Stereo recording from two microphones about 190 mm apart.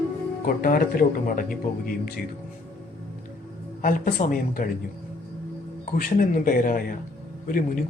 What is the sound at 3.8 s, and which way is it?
Speech, 45° left (ahead or behind).